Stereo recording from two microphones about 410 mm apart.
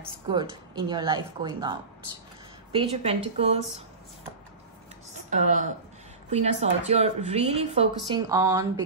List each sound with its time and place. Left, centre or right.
0.3 s speech: centre
5.3 s speech: centre